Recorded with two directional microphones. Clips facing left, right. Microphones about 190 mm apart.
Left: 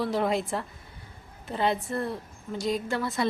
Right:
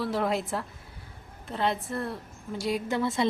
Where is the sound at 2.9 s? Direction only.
25° right (ahead or behind).